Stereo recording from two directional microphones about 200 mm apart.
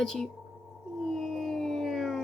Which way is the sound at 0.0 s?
Centre (ahead or behind).